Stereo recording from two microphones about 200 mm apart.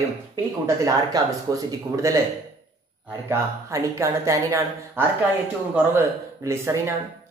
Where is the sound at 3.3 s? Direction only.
15° right (ahead or behind).